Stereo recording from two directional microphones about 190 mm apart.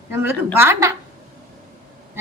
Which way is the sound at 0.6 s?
15° right (ahead or behind).